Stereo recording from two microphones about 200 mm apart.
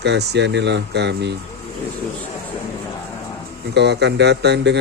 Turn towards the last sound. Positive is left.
turn(degrees=-55)  # may be behind; listen again after turning